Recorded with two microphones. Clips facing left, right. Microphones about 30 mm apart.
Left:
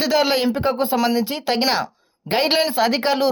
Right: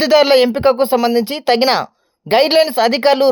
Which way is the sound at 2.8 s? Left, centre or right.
Right.